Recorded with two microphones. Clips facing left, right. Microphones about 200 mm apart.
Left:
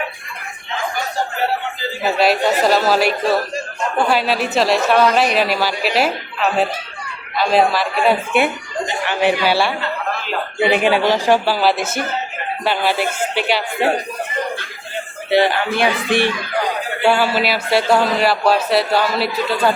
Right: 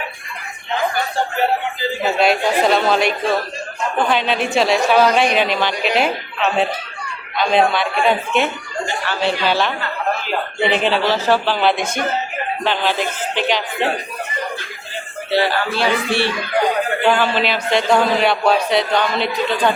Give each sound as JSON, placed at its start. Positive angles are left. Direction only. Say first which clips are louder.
{"t": 2.1, "sound": "a man's voice", "louder": "left 1 dB", "side_deg": 0}
{"t": 15.3, "sound": "a man's voice", "louder": "left 3 dB", "side_deg": 20}